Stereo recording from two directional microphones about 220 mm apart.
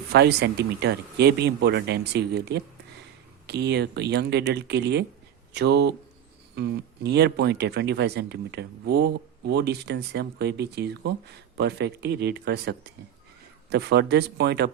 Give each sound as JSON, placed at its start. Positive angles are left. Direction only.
{"t": 0.1, "sound": "speech", "side_deg": -50}